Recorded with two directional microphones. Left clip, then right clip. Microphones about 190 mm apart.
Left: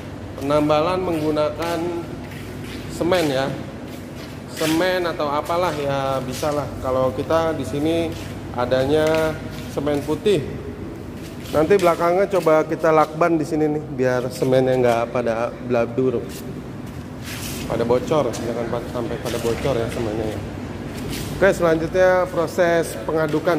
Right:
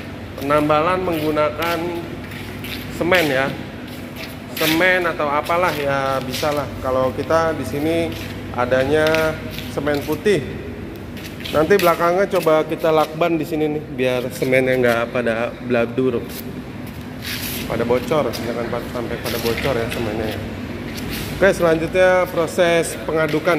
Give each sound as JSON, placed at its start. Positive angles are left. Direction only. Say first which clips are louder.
{"t": 0.4, "sound": "speech", "louder": "right 2 dB", "side_deg": 0}
{"t": 3.0, "sound": "speech", "louder": "right 3 dB", "side_deg": -5}
{"t": 4.6, "sound": "speech", "louder": "right 4 dB", "side_deg": -5}
{"t": 11.5, "sound": "speech", "louder": "right 1 dB", "side_deg": 5}
{"t": 13.4, "sound": "a man's voice", "louder": "even", "side_deg": 50}
{"t": 14.6, "sound": "speech", "louder": "right 1 dB", "side_deg": 0}
{"t": 17.6, "sound": "speech", "louder": "even", "side_deg": 10}
{"t": 21.4, "sound": "speech", "louder": "right 1 dB", "side_deg": 0}